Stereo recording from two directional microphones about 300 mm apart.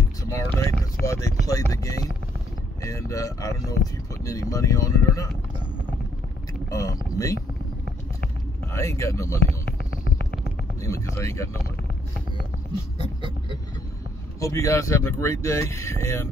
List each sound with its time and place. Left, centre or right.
0.3 s vehicle: centre
2.8 s speech: centre
6.7 s speech: centre
8.7 s speech: centre
10.8 s speech: centre
14.4 s speech: centre